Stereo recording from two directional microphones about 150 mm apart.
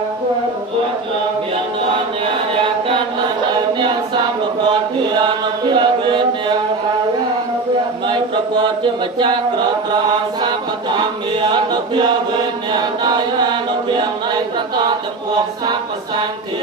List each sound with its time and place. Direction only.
5.7 s chant: 30° right (ahead or behind)
8.1 s a sound: 30° right (ahead or behind)
11.4 s chant: 30° right (ahead or behind)
13.0 s chant: 30° right (ahead or behind)